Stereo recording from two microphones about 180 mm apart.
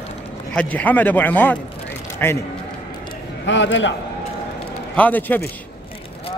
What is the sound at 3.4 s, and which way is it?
Speech, 90° left.